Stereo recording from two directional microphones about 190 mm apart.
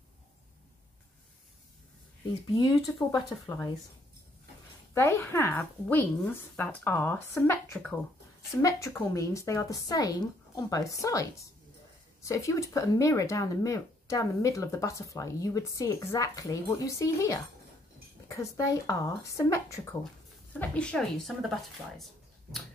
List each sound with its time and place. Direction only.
2.5 s speech: 20° left (ahead or behind)
4.9 s a woman's voice: 15° left (ahead or behind)
21.9 s a sound: centre (ahead or behind)